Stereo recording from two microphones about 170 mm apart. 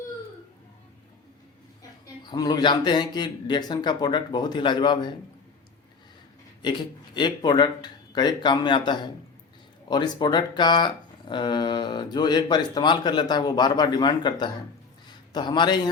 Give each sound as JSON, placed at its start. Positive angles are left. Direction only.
{"t": 2.3, "sound": "speech", "side_deg": 25}
{"t": 6.6, "sound": "a man's voice", "side_deg": 25}